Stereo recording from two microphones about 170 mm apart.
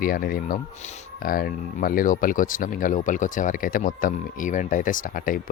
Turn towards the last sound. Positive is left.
turn(degrees=55)  # may be behind; listen again after turning